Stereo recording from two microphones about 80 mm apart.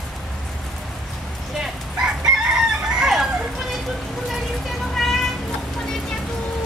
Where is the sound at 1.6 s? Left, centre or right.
Centre.